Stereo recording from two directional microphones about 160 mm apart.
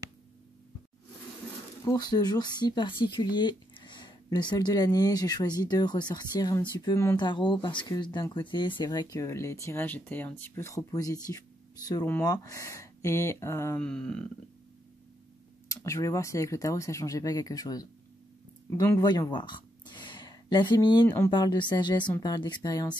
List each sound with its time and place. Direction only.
1.9 s speech: 25° left (ahead or behind)
13.8 s a sound: 5° left (ahead or behind)
15.7 s speech: 20° left (ahead or behind)